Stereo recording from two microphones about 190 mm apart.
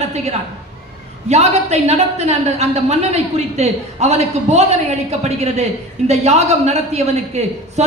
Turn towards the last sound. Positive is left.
turn(degrees=-35)  # may be behind; listen again after turning